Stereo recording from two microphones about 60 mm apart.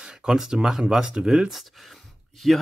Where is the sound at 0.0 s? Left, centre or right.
Centre.